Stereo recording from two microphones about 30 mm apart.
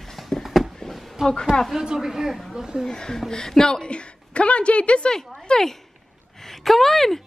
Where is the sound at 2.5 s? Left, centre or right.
Right.